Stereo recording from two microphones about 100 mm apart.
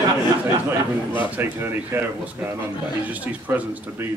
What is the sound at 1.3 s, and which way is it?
Speech, 20° right (ahead or behind).